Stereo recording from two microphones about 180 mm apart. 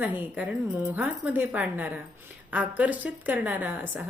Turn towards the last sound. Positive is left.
turn(degrees=-10)  # may be behind; listen again after turning